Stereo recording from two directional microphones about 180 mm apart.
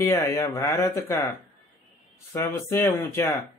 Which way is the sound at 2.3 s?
15° left (ahead or behind).